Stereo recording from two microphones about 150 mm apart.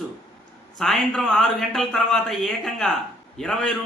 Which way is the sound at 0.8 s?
5° left (ahead or behind).